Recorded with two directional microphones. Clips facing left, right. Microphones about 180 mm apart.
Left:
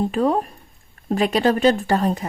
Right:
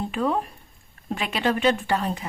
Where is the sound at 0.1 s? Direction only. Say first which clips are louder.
Left 5 dB; 40° left (ahead or behind).